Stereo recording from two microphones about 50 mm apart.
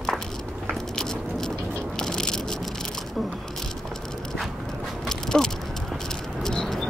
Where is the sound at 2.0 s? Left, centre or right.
Centre.